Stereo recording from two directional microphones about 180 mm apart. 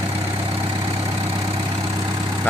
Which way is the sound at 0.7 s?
20° right (ahead or behind).